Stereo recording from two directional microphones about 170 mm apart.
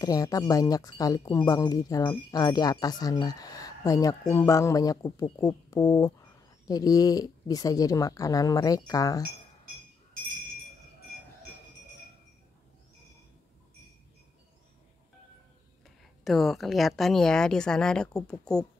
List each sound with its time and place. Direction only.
0.0 s speech: 20° left (ahead or behind)
16.3 s a woman's voice: centre (ahead or behind)